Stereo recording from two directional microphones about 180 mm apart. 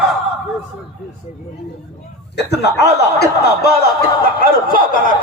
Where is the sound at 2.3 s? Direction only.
65° left (ahead or behind).